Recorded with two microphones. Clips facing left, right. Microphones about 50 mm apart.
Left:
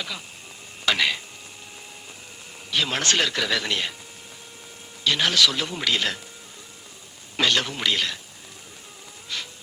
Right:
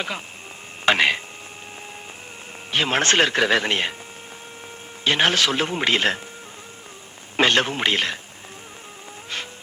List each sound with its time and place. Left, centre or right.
0.9 s a man's voice: right
2.6 s a man's voice: right
5.0 s a man's voice: right
7.3 s a man's voice: right
9.3 s music: right